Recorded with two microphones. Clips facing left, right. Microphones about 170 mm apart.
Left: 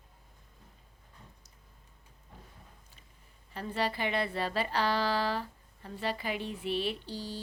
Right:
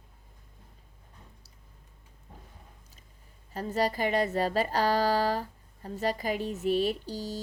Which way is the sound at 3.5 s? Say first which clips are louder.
Right 4 dB; 40° right (ahead or behind).